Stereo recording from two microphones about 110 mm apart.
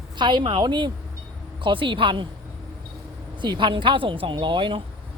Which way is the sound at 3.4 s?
45° right (ahead or behind).